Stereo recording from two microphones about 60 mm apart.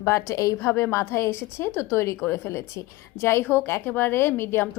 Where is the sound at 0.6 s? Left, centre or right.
Left.